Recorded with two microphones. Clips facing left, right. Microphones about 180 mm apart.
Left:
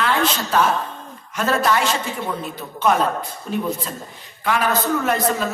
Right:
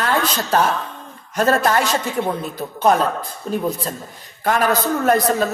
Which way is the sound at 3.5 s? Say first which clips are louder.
Right 2 dB; 35° right (ahead or behind).